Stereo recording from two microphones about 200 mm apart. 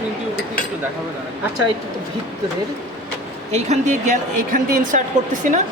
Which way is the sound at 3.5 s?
35° right (ahead or behind).